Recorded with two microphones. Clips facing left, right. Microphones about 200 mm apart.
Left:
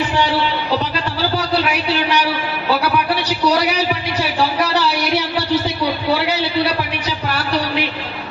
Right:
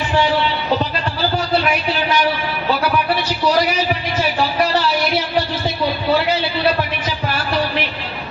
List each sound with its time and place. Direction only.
3.2 s a man's voice: 70° left (ahead or behind)